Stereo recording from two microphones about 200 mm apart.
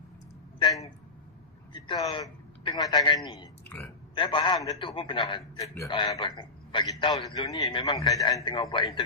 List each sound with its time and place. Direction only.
1.7 s a man's voice: 25° left (ahead or behind)